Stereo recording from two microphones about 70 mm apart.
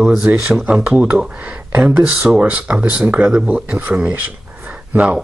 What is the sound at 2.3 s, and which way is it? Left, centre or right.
Speech, centre.